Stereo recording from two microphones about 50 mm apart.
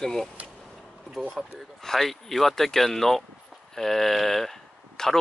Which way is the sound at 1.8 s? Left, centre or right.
Centre.